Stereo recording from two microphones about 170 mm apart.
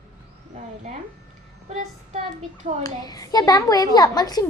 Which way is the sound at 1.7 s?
40° right (ahead or behind).